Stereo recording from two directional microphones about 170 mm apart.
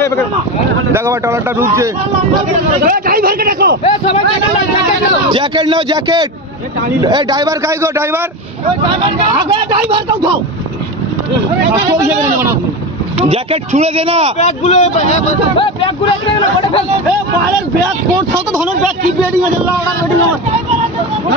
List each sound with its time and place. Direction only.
0.9 s speech: 15° right (ahead or behind)
2.8 s a man's voice: 55° right (ahead or behind)
3.8 s speech: 35° left (ahead or behind)
5.3 s a man's voice: 30° right (ahead or behind)
9.4 s a man's voice: 30° right (ahead or behind)
13.2 s speech: 35° right (ahead or behind)
14.4 s speech: 45° left (ahead or behind)